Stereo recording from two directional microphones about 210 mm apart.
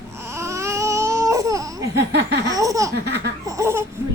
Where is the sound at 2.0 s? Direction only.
55° right (ahead or behind).